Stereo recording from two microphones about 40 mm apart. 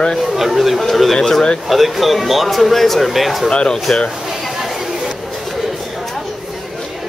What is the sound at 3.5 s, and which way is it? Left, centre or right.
Speech, left.